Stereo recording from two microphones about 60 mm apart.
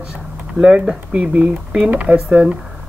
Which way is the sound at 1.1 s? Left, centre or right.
Right.